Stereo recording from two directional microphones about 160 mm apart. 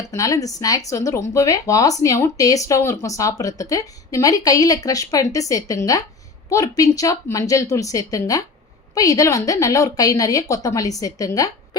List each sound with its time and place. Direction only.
0.1 s speech: 20° left (ahead or behind)